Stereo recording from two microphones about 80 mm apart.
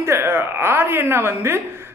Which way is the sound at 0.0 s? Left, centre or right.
Right.